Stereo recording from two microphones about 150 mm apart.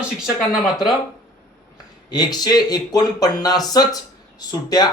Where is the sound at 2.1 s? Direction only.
25° left (ahead or behind).